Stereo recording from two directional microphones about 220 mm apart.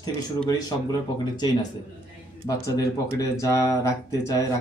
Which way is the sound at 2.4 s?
15° left (ahead or behind).